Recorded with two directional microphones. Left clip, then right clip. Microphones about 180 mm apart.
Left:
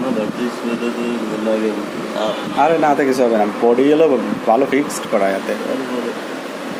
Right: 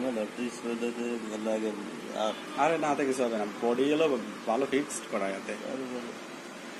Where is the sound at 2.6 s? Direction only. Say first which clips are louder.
Left 13 dB; 15° left (ahead or behind).